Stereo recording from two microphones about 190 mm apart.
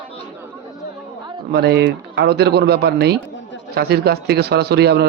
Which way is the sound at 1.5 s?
60° right (ahead or behind).